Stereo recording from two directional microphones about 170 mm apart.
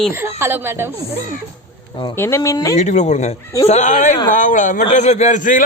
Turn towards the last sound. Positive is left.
turn(degrees=50)  # may be behind; listen again after turning